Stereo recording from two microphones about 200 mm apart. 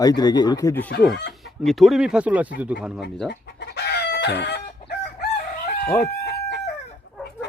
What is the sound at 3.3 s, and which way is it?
Chicken, 55° left (ahead or behind).